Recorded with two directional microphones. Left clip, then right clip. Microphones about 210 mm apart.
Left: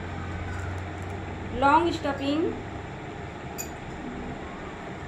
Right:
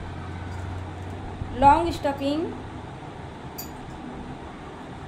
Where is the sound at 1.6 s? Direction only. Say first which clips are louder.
Right 3 dB; 40° right (ahead or behind).